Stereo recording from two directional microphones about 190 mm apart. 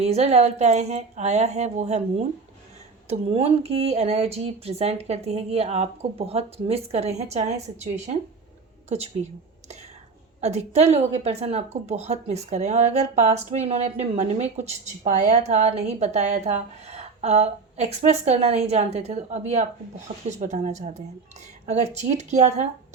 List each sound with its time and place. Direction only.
0.0 s a woman's voice: 35° right (ahead or behind)
10.4 s a woman's voice: 35° right (ahead or behind)
22.1 s a woman's voice: 35° right (ahead or behind)